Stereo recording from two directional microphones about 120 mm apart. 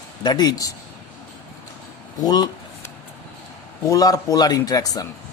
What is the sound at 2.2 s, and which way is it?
Speech, 35° left (ahead or behind).